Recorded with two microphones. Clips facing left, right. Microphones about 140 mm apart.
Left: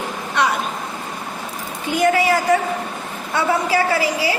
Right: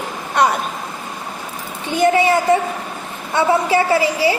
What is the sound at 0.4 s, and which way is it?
Speech, 45° right (ahead or behind).